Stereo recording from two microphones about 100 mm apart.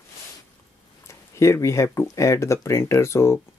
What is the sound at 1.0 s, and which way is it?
Speech, 30° left (ahead or behind).